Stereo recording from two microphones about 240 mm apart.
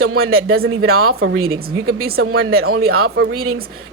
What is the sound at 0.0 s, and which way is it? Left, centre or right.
Speech, right.